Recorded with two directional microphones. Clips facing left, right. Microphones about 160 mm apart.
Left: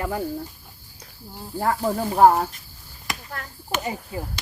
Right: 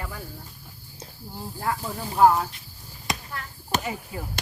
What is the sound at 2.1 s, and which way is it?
Speech, 50° left (ahead or behind).